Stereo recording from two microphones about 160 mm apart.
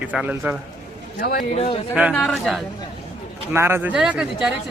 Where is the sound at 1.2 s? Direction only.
70° left (ahead or behind).